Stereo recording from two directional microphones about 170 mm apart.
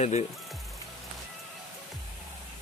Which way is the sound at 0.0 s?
40° left (ahead or behind).